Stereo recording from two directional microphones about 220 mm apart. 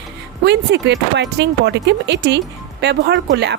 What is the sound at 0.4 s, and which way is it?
Speech, 50° right (ahead or behind).